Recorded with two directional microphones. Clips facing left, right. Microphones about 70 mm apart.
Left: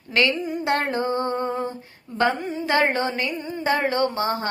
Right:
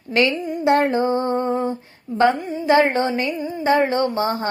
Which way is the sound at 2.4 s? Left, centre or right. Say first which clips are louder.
Right 2 dB; centre.